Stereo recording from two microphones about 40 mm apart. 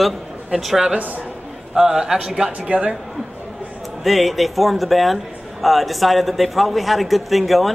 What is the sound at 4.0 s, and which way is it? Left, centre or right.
Speech, centre.